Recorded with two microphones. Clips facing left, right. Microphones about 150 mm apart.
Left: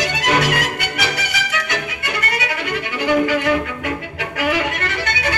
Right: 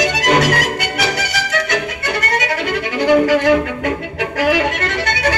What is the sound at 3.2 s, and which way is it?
Violin, 75° right (ahead or behind).